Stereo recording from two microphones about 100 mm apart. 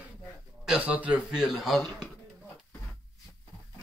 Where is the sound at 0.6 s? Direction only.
10° right (ahead or behind).